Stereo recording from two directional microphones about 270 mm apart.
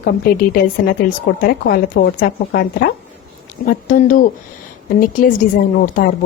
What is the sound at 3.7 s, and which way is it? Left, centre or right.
Speech, left.